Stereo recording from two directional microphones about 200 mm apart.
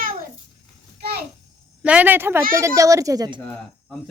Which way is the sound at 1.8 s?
10° right (ahead or behind).